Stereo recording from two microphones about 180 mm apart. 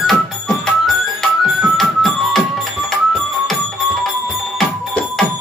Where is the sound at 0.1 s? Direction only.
5° left (ahead or behind).